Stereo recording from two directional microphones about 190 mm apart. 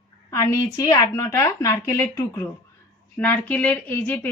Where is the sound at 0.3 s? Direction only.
15° left (ahead or behind).